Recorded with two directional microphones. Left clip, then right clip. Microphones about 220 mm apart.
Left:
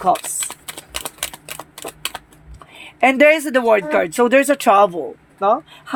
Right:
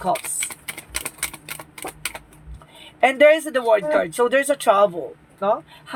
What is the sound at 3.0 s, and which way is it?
Speech, 50° left (ahead or behind).